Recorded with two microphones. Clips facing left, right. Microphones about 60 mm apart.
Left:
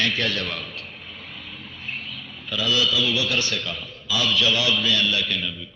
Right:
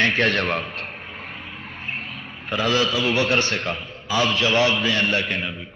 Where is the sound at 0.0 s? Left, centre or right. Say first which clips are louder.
Right 5 dB; right.